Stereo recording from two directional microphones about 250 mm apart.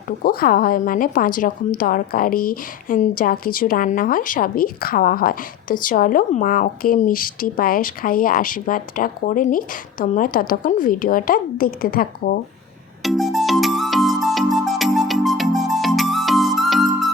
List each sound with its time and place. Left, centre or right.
0.2 s a woman's voice: left
13.0 s music: centre